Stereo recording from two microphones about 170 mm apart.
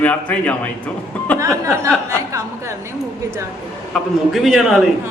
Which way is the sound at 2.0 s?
20° right (ahead or behind).